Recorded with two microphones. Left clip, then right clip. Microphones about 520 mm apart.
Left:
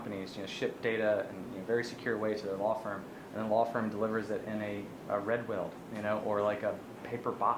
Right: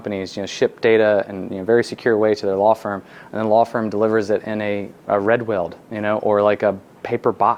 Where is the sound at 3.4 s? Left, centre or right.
Right.